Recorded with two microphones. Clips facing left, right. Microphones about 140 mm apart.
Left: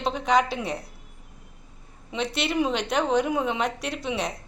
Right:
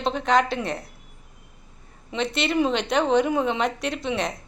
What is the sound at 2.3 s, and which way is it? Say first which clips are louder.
A woman's voice: right 3 dB; 5° left (ahead or behind).